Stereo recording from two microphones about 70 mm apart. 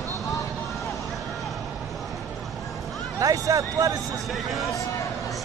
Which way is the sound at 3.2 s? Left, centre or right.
Right.